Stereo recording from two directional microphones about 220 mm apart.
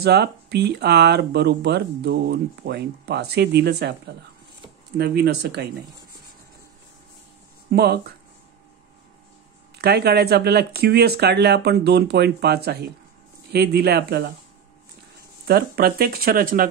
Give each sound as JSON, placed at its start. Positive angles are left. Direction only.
{"t": 0.0, "sound": "speech", "side_deg": -50}
{"t": 4.9, "sound": "speech", "side_deg": -45}
{"t": 7.7, "sound": "speech", "side_deg": -45}
{"t": 9.8, "sound": "speech", "side_deg": -45}
{"t": 15.4, "sound": "speech", "side_deg": -45}